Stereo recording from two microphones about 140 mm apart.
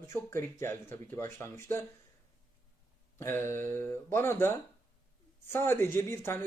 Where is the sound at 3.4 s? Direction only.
65° right (ahead or behind).